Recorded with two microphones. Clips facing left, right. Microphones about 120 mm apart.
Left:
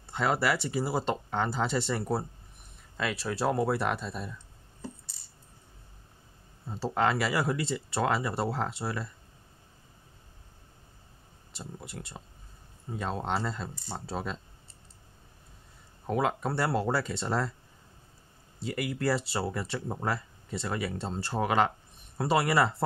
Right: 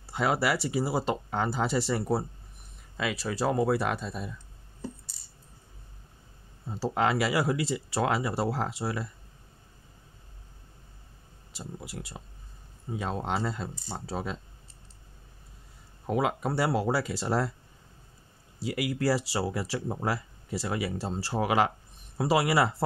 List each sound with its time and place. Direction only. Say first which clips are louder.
0.0 s speech: right 1 dB; 5° right (ahead or behind)
6.7 s speech: right 1 dB; centre (ahead or behind)
11.5 s speech: right 2 dB; centre (ahead or behind)
16.1 s speech: right 1 dB; 5° right (ahead or behind)
18.6 s speech: right 2 dB; 5° right (ahead or behind)